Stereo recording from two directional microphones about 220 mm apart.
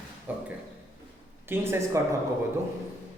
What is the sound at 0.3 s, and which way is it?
Speech, 5° right (ahead or behind).